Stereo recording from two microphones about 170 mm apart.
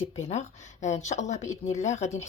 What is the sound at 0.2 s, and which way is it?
Speech, 40° left (ahead or behind).